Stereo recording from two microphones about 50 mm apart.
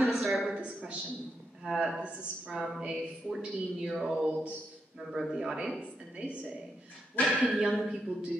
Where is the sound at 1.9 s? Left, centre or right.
Right.